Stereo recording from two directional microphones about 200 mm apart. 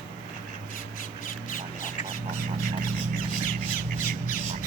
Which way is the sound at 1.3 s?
40° left (ahead or behind).